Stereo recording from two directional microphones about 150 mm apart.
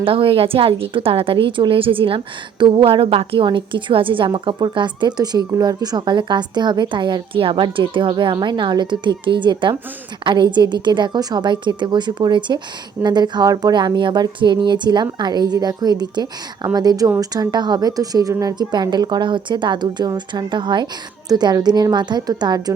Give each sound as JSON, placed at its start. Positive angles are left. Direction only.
{"t": 0.0, "sound": "a woman's voice", "side_deg": -40}